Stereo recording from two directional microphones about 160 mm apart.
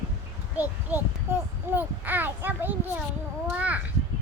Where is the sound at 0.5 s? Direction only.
10° right (ahead or behind).